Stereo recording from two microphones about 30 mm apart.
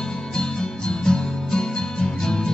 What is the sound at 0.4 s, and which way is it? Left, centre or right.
Music, left.